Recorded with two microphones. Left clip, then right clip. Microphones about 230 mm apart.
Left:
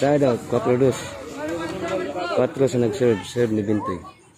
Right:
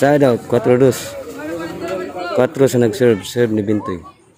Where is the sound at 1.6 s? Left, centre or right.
Right.